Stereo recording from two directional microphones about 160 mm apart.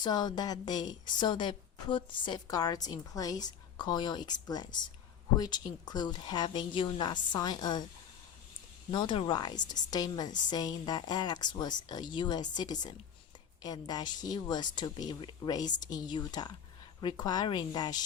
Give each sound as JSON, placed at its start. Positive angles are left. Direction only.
{"t": 0.0, "sound": "a woman's voice", "side_deg": 25}
{"t": 8.9, "sound": "a woman's voice", "side_deg": 30}